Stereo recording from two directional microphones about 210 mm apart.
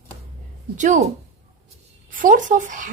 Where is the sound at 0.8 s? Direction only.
35° right (ahead or behind).